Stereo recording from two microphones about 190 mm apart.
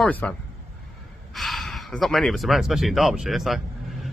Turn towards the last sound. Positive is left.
turn(degrees=0)  # may be behind; listen again after turning